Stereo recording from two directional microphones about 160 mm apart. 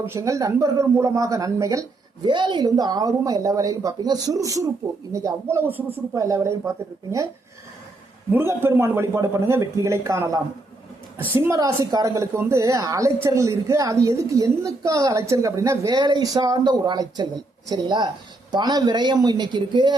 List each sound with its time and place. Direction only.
0.0 s a woman's voice: 15° right (ahead or behind)
8.3 s a woman's voice: 15° right (ahead or behind)